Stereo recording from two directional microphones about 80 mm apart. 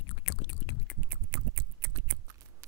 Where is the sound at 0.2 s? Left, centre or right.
Left.